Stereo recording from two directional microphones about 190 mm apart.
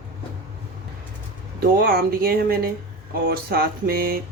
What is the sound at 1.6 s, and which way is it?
Speech, 50° right (ahead or behind).